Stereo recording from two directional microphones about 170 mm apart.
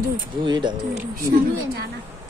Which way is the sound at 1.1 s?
60° right (ahead or behind).